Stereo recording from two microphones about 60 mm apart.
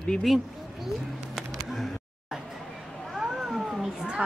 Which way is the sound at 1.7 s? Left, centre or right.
Centre.